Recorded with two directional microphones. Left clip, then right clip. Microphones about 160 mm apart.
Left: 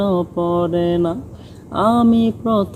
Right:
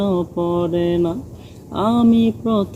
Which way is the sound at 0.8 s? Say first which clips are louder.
Left 1 dB; 30° right (ahead or behind).